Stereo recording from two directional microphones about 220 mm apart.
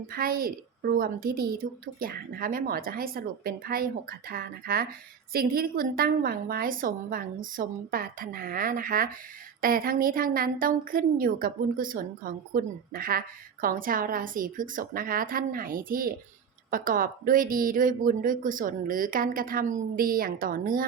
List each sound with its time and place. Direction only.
0.1 s a woman's voice: 40° right (ahead or behind)